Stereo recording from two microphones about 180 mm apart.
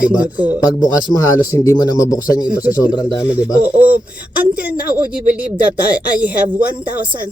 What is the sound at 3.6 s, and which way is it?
Speech, 10° right (ahead or behind).